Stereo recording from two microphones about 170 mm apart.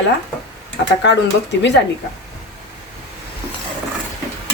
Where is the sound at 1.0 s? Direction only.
90° left.